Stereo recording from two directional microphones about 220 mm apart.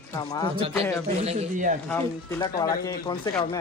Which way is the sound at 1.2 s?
30° right (ahead or behind).